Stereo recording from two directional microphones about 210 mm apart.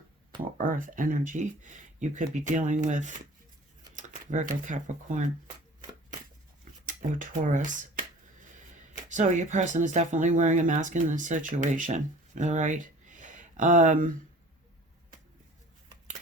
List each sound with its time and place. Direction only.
0.6 s speech: 40° right (ahead or behind)
6.8 s speech: 40° right (ahead or behind)
9.0 s speech: 35° right (ahead or behind)